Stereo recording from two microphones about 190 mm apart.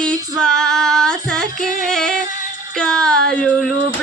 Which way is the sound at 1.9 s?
5° left (ahead or behind).